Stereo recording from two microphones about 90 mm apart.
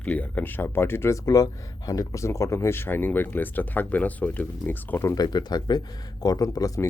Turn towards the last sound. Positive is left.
turn(degrees=40)  # may be behind; listen again after turning